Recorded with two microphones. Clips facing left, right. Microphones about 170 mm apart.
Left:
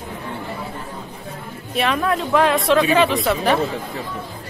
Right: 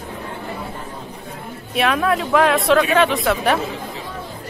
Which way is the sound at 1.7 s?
Centre (ahead or behind).